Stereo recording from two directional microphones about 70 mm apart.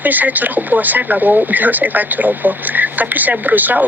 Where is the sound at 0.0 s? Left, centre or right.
Right.